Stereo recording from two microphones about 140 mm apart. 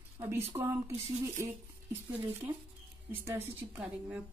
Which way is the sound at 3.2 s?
15° right (ahead or behind).